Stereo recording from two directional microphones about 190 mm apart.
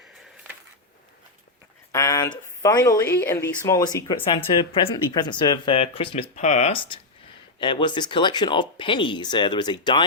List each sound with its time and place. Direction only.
1.9 s speech: 15° left (ahead or behind)